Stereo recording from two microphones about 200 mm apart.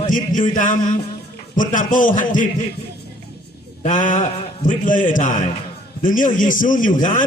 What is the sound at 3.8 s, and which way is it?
A man's voice, 40° left (ahead or behind).